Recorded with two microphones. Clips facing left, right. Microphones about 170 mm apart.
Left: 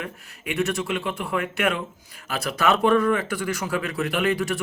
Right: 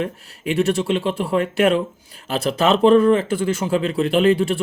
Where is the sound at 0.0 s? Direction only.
30° right (ahead or behind).